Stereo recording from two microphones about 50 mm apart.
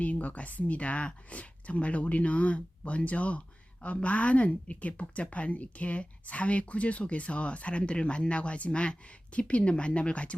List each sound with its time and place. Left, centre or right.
0.0 s speech: left